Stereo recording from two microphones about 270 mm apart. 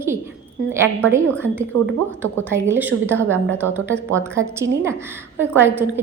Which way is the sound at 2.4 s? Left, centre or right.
Centre.